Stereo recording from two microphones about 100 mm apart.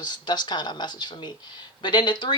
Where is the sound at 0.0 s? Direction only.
45° left (ahead or behind).